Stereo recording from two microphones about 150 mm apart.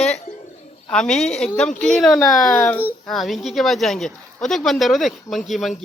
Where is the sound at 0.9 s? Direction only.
5° left (ahead or behind).